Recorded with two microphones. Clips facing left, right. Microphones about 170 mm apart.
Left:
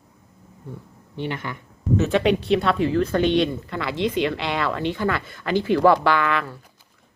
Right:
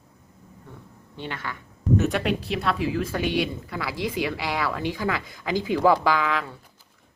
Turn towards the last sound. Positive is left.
turn(degrees=-10)  # may be behind; listen again after turning